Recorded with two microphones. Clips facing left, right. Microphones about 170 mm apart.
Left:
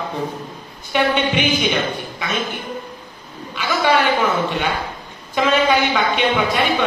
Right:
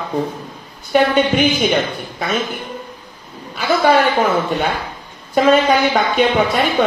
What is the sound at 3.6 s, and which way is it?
Speech, 40° right (ahead or behind).